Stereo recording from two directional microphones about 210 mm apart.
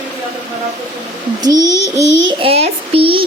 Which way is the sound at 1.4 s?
15° right (ahead or behind).